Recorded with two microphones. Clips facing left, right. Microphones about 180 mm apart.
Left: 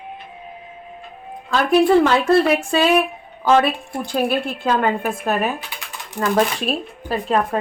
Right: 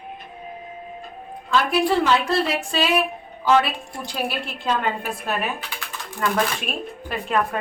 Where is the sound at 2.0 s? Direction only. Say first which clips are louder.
Left 5 dB; 50° left (ahead or behind).